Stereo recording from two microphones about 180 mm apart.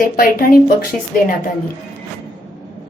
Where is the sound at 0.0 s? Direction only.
50° left (ahead or behind).